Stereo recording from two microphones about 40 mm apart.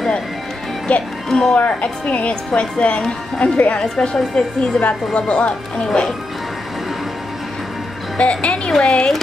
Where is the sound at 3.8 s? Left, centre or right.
Centre.